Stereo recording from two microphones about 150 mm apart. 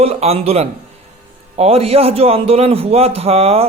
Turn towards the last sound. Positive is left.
turn(degrees=-40)  # may be behind; listen again after turning